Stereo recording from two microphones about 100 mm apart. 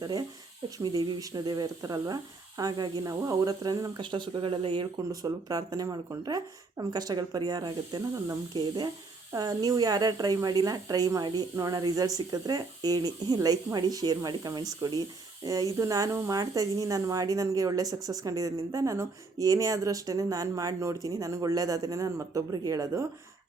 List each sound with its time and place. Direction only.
0.0 s a woman's voice: 40° right (ahead or behind)
3.0 s a woman's voice: 35° right (ahead or behind)
4.0 s speech: 50° right (ahead or behind)
5.2 s a woman's voice: 40° right (ahead or behind)